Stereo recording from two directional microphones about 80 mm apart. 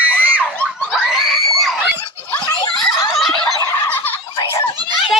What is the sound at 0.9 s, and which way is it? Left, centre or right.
Screaming, centre.